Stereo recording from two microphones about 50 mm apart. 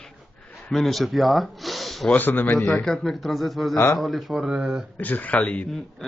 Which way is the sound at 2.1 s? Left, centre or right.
Left.